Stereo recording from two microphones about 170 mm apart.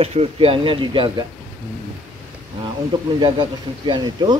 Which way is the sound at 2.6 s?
25° right (ahead or behind).